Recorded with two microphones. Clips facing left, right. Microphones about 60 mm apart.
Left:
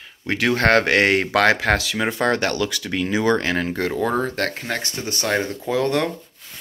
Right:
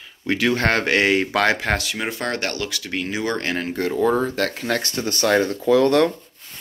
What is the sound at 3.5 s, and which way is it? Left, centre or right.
Speech, left.